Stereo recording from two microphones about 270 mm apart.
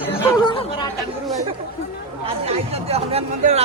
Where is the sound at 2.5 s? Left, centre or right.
Right.